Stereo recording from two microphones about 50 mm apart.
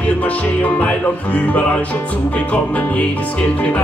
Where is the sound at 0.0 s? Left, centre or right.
Left.